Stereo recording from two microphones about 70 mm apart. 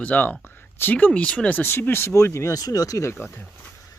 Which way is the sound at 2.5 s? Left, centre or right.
Left.